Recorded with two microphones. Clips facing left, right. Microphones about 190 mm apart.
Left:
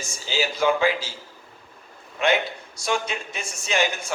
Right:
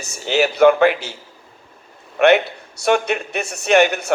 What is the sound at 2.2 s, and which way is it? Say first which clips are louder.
A man's voice: right 9 dB; 65° right (ahead or behind).